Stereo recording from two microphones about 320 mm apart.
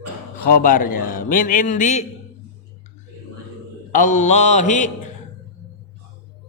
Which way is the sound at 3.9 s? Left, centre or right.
Left.